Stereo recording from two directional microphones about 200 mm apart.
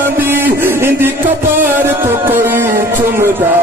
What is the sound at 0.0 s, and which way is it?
Music, 10° right (ahead or behind).